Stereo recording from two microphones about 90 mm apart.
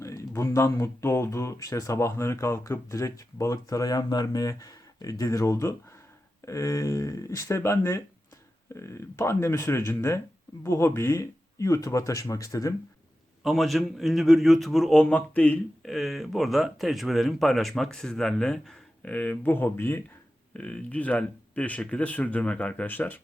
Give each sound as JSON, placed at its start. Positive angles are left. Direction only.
{"t": 0.0, "sound": "speech", "side_deg": 35}
{"t": 13.4, "sound": "speech", "side_deg": 0}
{"t": 14.9, "sound": "speech", "side_deg": 15}
{"t": 15.8, "sound": "speech", "side_deg": 0}
{"t": 19.1, "sound": "speech", "side_deg": 20}